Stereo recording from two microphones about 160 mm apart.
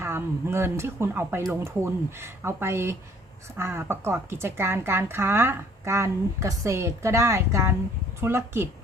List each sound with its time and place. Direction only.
0.0 s a woman's voice: 15° right (ahead or behind)